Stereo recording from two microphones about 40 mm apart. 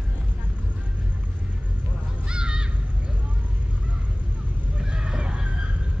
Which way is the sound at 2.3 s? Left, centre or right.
Right.